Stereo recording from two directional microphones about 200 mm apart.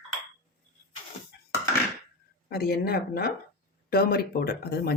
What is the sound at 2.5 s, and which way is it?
Speech, 50° left (ahead or behind).